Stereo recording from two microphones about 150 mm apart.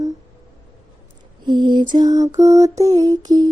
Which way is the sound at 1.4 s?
30° right (ahead or behind).